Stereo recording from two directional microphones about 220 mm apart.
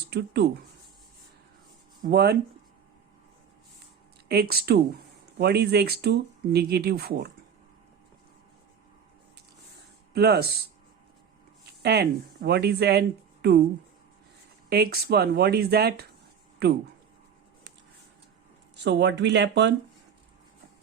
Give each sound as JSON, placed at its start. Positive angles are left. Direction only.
{"t": 0.1, "sound": "speech", "side_deg": -50}
{"t": 2.0, "sound": "speech", "side_deg": -45}
{"t": 4.3, "sound": "speech", "side_deg": -45}
{"t": 10.1, "sound": "speech", "side_deg": -50}
{"t": 11.6, "sound": "speech", "side_deg": -50}
{"t": 14.7, "sound": "speech", "side_deg": -45}
{"t": 18.8, "sound": "speech", "side_deg": -50}